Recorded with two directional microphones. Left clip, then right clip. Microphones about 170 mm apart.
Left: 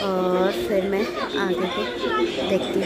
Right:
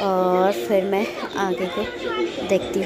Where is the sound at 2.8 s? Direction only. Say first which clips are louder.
Even; 20° right (ahead or behind).